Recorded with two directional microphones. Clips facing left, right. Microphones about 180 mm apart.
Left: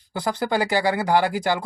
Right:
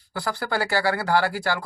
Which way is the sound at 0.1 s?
20° left (ahead or behind).